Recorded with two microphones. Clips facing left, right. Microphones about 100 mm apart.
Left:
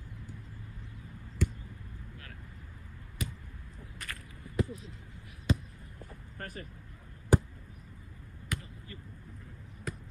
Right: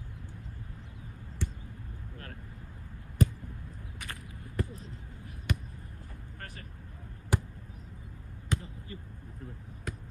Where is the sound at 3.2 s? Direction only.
40° right (ahead or behind).